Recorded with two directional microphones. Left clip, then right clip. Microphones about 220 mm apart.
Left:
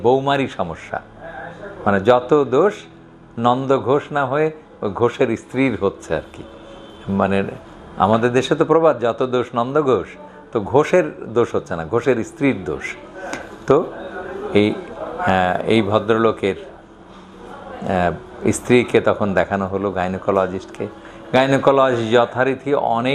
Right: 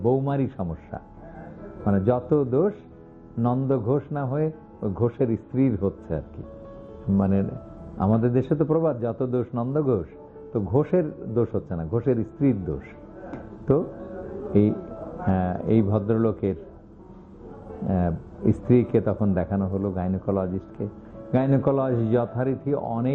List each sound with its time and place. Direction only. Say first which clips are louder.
0.0 s speech: left 8 dB; 35° left (ahead or behind)
0.3 s a man's voice: left 9 dB; 10° left (ahead or behind)
17.7 s speech: left 9 dB; 10° left (ahead or behind)